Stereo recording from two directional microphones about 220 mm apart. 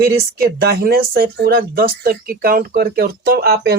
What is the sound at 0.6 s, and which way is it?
Speech, 45° right (ahead or behind).